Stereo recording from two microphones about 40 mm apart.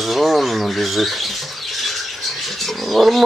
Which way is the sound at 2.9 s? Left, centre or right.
Centre.